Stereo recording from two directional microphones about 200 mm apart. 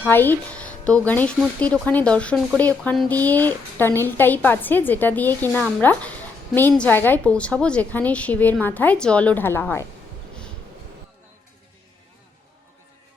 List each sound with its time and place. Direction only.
0.1 s a woman's voice: 10° left (ahead or behind)